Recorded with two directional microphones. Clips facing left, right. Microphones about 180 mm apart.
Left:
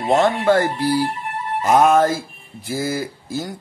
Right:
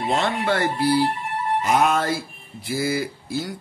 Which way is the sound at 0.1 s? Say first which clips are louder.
Left 8 dB; 45° left (ahead or behind).